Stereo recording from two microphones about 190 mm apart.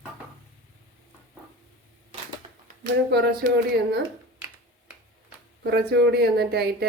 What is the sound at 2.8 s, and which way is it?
Speech, 60° right (ahead or behind).